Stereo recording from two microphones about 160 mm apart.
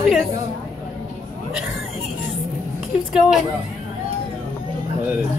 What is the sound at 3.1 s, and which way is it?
Speech, 5° right (ahead or behind).